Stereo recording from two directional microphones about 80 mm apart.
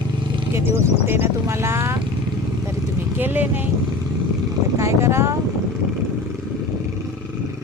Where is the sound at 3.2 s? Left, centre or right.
Right.